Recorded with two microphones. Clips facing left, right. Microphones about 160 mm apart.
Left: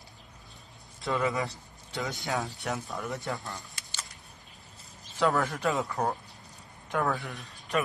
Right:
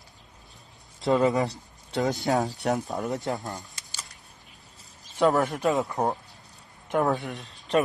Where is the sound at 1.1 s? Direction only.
35° right (ahead or behind).